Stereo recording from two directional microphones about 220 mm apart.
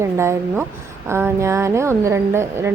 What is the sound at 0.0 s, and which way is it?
A woman's voice, 10° right (ahead or behind).